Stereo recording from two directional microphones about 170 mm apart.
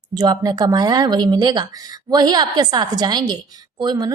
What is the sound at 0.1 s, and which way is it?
A woman's voice, 25° right (ahead or behind).